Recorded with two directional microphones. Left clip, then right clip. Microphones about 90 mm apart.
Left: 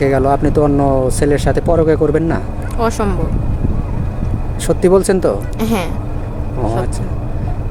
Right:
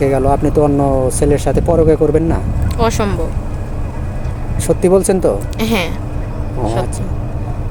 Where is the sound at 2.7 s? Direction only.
30° left (ahead or behind).